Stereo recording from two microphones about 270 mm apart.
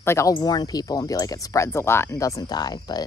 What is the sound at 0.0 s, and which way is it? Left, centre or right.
Speech, centre.